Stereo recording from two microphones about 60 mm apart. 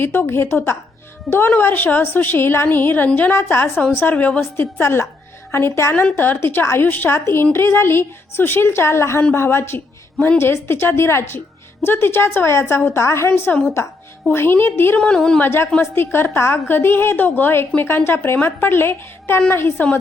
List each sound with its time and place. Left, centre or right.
0.0 s a woman's voice: left
4.1 s a woman's voice: left
4.4 s a woman's voice: left
6.1 s a woman's voice: left
14.9 s a woman's voice: centre
15.4 s a woman's voice: left